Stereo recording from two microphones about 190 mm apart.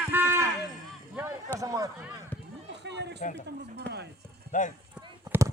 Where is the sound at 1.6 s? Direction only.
15° right (ahead or behind).